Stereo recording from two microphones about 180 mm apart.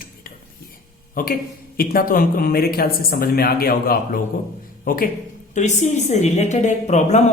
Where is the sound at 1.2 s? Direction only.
55° left (ahead or behind).